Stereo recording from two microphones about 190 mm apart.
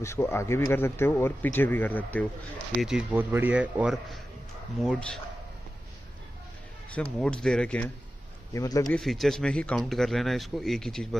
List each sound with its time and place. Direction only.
0.0 s speech: 15° left (ahead or behind)
2.8 s a man's voice: 5° right (ahead or behind)
6.9 s speech: 5° left (ahead or behind)
8.5 s speech: 20° left (ahead or behind)
8.8 s speech: centre (ahead or behind)